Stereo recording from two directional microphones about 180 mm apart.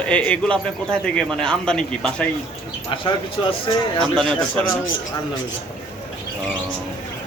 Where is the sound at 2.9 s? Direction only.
30° left (ahead or behind).